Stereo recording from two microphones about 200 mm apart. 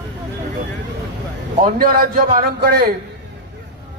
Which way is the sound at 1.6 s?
45° right (ahead or behind).